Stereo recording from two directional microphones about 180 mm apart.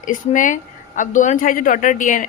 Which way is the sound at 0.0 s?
45° left (ahead or behind).